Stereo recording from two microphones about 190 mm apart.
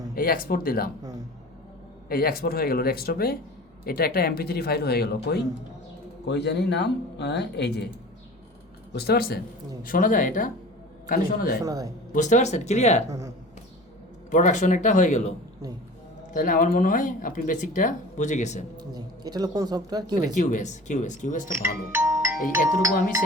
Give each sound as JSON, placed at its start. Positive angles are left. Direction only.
{"t": 0.2, "sound": "speech", "side_deg": 50}
{"t": 2.0, "sound": "speech", "side_deg": 50}
{"t": 8.9, "sound": "speech", "side_deg": 55}
{"t": 11.6, "sound": "a man's voice", "side_deg": -20}
{"t": 12.1, "sound": "speech", "side_deg": 40}
{"t": 13.1, "sound": "speech", "side_deg": -15}
{"t": 14.3, "sound": "speech", "side_deg": 40}
{"t": 16.3, "sound": "speech", "side_deg": 45}
{"t": 18.9, "sound": "a man's voice", "side_deg": -20}
{"t": 20.2, "sound": "speech", "side_deg": 40}
{"t": 21.9, "sound": "music", "side_deg": -15}
{"t": 22.5, "sound": "speech", "side_deg": -15}